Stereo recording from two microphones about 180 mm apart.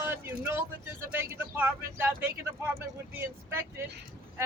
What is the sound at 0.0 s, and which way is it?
Vehicle, 15° right (ahead or behind).